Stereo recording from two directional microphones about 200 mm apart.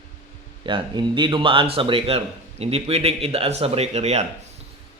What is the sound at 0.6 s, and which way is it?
A man's voice, 25° right (ahead or behind).